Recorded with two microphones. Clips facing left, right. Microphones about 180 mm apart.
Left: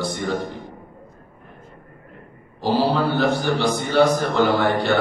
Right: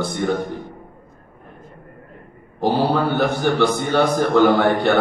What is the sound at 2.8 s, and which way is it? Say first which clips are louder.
A man's voice: even; 55° right (ahead or behind).